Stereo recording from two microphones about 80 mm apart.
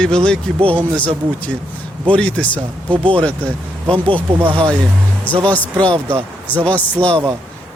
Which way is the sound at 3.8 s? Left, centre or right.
Right.